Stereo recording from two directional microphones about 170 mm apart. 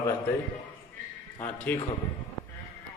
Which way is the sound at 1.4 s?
15° left (ahead or behind).